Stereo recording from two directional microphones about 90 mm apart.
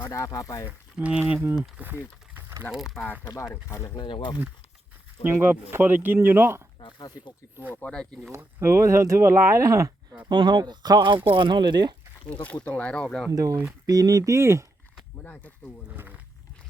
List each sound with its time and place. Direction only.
0.0 s speech: 35° left (ahead or behind)
0.9 s speech: 15° right (ahead or behind)
2.7 s speech: centre (ahead or behind)
3.5 s speech: 35° left (ahead or behind)
3.9 s speech: 65° left (ahead or behind)
5.3 s speech: 25° right (ahead or behind)
6.7 s speech: 65° left (ahead or behind)
7.8 s speech: 10° left (ahead or behind)
8.6 s speech: 30° right (ahead or behind)
10.2 s speech: 55° right (ahead or behind)
12.6 s speech: 10° left (ahead or behind)
13.3 s speech: 40° right (ahead or behind)
15.2 s speech: 15° left (ahead or behind)
15.9 s speech: 20° right (ahead or behind)